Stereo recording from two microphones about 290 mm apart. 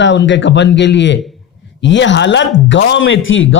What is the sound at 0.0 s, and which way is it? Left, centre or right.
A man's voice, left.